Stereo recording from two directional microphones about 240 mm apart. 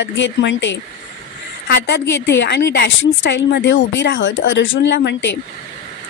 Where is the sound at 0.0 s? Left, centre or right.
Left.